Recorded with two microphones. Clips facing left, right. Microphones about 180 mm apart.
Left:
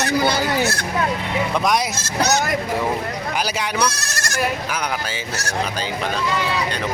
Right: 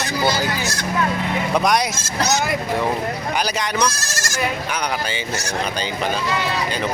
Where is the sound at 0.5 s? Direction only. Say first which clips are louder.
Left 4 dB; 60° left (ahead or behind).